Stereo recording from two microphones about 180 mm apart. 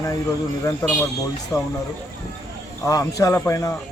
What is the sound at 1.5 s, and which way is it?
Speech, 20° left (ahead or behind).